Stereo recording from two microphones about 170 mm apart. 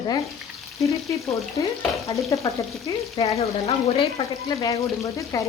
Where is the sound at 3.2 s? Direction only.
35° left (ahead or behind).